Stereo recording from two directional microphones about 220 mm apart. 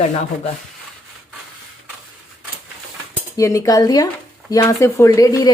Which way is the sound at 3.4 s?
15° left (ahead or behind).